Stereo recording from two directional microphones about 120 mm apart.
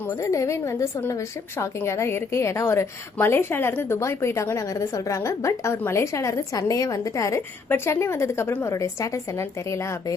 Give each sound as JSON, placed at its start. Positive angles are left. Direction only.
{"t": 0.0, "sound": "a woman's voice", "side_deg": 25}